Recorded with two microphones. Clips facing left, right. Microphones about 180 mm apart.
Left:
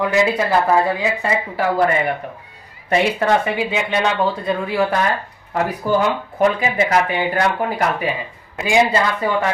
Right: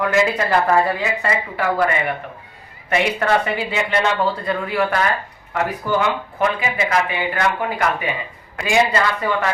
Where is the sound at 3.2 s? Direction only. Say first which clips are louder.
Left 2 dB; 20° left (ahead or behind).